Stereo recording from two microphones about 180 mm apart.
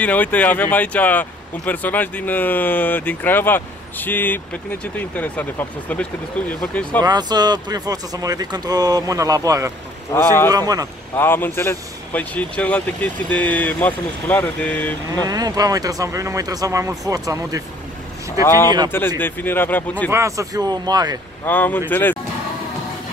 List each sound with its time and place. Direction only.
0.0 s speech: 10° left (ahead or behind)
7.0 s speech: 20° right (ahead or behind)
10.1 s speech: 15° left (ahead or behind)
10.5 s speech: 20° right (ahead or behind)
11.1 s speech: 10° left (ahead or behind)
15.2 s speech: 20° right (ahead or behind)
18.9 s speech: 10° left (ahead or behind)
20.1 s speech: 15° right (ahead or behind)
21.5 s speech: 10° left (ahead or behind)